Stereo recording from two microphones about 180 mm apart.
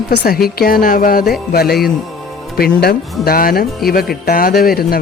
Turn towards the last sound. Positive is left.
turn(degrees=55)  # may be behind; listen again after turning